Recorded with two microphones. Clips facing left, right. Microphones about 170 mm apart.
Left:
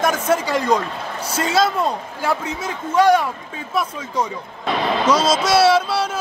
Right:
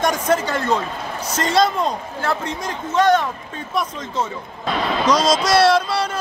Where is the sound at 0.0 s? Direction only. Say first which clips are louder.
Even; 5° left (ahead or behind).